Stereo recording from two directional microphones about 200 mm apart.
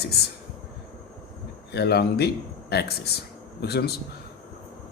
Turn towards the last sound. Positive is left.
turn(degrees=55)  # may be behind; listen again after turning